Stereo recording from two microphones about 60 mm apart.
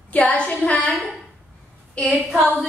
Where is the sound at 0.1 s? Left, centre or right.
Left.